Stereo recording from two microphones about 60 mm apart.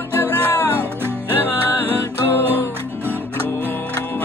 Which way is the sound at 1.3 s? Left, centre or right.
Left.